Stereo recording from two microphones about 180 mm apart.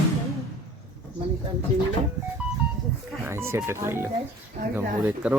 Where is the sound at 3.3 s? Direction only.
15° right (ahead or behind).